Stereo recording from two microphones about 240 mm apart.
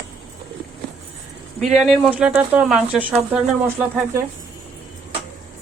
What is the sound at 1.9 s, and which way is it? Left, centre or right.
Speech, centre.